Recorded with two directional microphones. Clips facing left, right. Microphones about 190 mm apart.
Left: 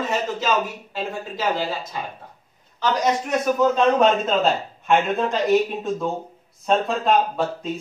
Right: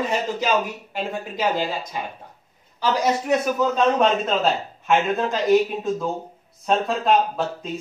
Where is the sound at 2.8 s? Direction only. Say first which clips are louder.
Even; 10° right (ahead or behind).